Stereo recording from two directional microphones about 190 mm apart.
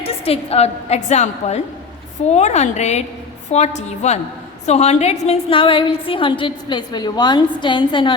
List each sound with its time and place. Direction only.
0.0 s a woman's voice: 30° left (ahead or behind)